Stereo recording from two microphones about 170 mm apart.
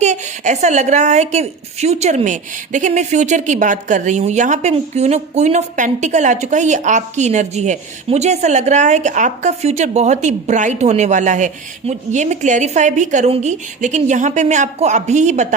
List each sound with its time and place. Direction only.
0.0 s a woman's voice: 45° right (ahead or behind)